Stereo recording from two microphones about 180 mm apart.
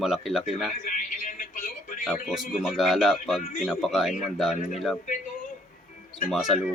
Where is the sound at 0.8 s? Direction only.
45° left (ahead or behind).